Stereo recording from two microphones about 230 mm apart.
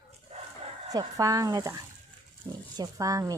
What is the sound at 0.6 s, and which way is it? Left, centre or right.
A woman's voice, centre.